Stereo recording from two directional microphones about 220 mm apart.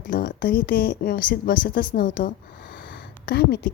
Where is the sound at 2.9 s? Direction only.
45° left (ahead or behind).